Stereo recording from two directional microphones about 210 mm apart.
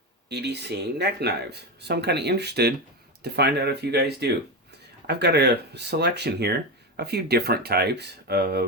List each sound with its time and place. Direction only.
0.3 s speech: 55° right (ahead or behind)